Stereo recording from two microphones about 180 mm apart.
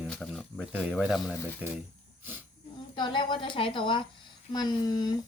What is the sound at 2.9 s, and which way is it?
Speech, 25° left (ahead or behind).